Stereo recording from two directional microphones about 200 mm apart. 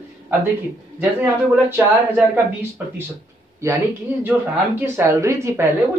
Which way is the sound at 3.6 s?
15° right (ahead or behind).